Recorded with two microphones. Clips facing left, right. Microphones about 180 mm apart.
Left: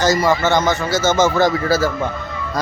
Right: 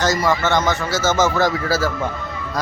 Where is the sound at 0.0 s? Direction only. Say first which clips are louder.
Left 3 dB; centre (ahead or behind).